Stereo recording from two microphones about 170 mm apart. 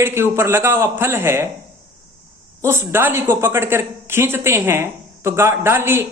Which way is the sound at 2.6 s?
15° right (ahead or behind).